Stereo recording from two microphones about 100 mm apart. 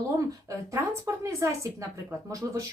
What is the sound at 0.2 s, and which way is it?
A woman's voice, 30° right (ahead or behind).